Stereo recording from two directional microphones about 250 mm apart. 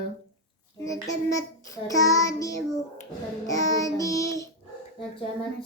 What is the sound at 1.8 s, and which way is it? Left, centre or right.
Child singing, centre.